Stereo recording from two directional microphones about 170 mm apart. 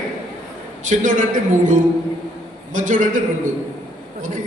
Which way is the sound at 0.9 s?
50° right (ahead or behind).